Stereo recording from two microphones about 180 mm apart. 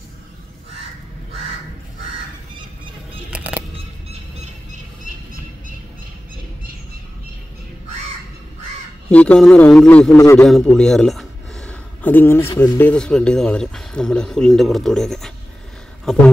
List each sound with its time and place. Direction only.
3.3 s music: 10° right (ahead or behind)
9.1 s speech: 5° left (ahead or behind)
10.1 s a man's voice: 15° left (ahead or behind)
10.4 s a sound: 5° left (ahead or behind)
12.7 s speech: 10° left (ahead or behind)